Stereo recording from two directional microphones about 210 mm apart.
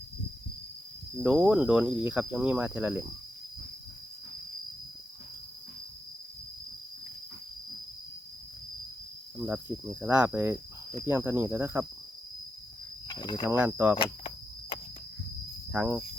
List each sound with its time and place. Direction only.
1.2 s cricket: 5° right (ahead or behind)
9.4 s speech: 10° right (ahead or behind)
13.1 s speech: 20° left (ahead or behind)
13.4 s speech: 10° right (ahead or behind)
14.0 s a sound: 25° left (ahead or behind)
15.7 s speech: 5° right (ahead or behind)